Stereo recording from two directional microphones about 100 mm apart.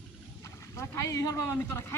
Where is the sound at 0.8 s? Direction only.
30° left (ahead or behind).